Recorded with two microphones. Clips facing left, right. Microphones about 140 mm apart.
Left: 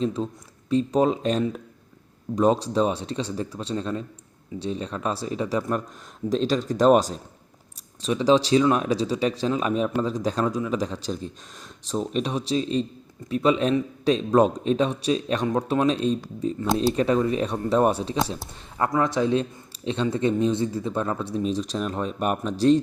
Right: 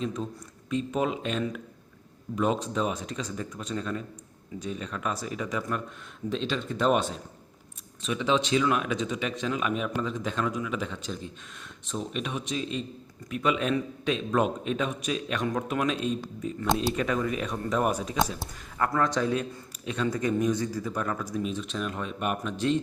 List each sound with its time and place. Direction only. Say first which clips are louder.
0.0 s a man's voice: left 6 dB; 30° left (ahead or behind)